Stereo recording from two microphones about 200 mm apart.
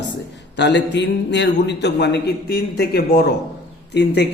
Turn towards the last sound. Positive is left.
turn(degrees=60)  # may be behind; listen again after turning